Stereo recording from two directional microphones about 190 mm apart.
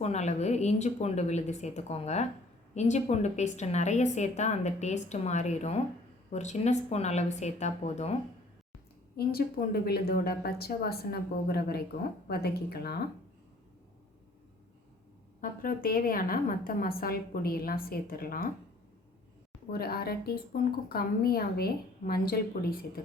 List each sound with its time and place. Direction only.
0.0 s a woman's voice: 35° left (ahead or behind)
9.1 s a woman's voice: 55° left (ahead or behind)
15.4 s a woman's voice: 50° left (ahead or behind)
19.7 s a woman's voice: 55° left (ahead or behind)